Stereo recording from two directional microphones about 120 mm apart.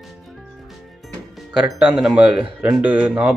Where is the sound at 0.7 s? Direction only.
Centre (ahead or behind).